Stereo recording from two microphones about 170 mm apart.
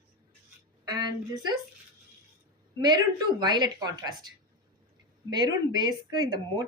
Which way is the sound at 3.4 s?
25° right (ahead or behind).